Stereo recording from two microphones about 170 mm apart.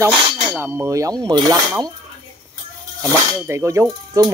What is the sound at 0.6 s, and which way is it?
Speech, 10° right (ahead or behind).